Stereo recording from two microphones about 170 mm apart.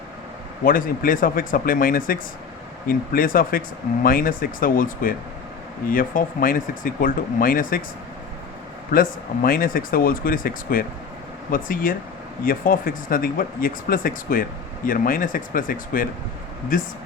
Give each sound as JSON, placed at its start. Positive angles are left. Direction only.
{"t": 0.6, "sound": "speech", "side_deg": 55}
{"t": 8.9, "sound": "speech", "side_deg": 60}